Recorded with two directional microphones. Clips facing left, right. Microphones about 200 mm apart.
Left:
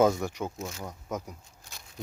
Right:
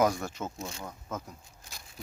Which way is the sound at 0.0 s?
20° left (ahead or behind).